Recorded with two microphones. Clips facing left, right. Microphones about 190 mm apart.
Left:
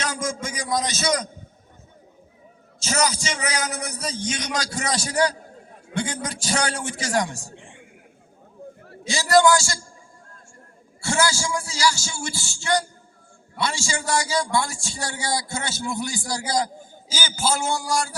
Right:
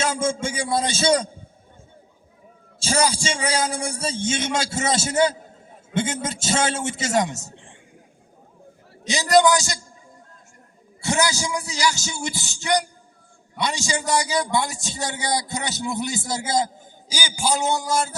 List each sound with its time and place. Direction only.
0.0 s a man's voice: 25° right (ahead or behind)
2.7 s a man's voice: 30° right (ahead or behind)
7.5 s a sound: 15° left (ahead or behind)
9.0 s a man's voice: 20° right (ahead or behind)
11.0 s a man's voice: 20° right (ahead or behind)